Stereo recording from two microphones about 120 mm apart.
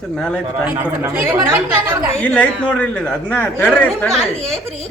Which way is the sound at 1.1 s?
20° right (ahead or behind).